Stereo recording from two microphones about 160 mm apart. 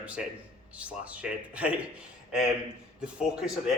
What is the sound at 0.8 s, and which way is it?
Speech, 10° right (ahead or behind).